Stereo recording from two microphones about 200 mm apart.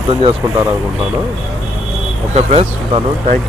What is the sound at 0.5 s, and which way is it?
Speech, 15° right (ahead or behind).